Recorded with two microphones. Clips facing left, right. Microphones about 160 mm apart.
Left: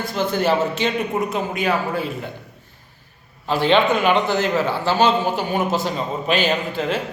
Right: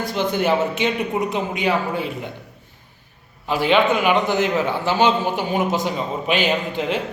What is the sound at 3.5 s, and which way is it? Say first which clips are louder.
A man's voice: left 1 dB; 10° right (ahead or behind).